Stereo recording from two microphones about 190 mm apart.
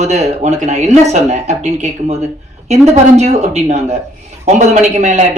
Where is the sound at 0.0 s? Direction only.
35° right (ahead or behind).